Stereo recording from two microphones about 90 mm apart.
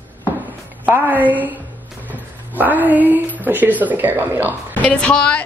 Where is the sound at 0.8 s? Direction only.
20° right (ahead or behind).